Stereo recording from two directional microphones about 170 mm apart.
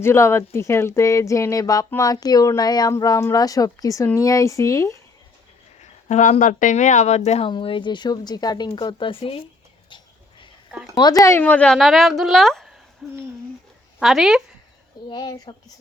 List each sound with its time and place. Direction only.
0.0 s speech: 15° left (ahead or behind)
5.8 s speech: 45° left (ahead or behind)
10.9 s a woman's voice: 20° left (ahead or behind); by 14.4 s centre (ahead or behind)
15.1 s speech: 25° left (ahead or behind)